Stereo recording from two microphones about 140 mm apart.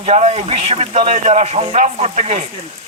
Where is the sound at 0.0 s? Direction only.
50° right (ahead or behind).